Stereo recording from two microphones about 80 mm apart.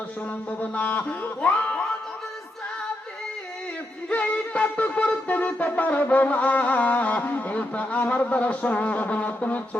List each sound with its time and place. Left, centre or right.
0.6 s speech: left
4.1 s shofar: centre